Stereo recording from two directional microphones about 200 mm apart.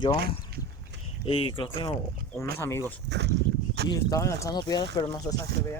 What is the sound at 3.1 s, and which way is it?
Speech, 60° right (ahead or behind).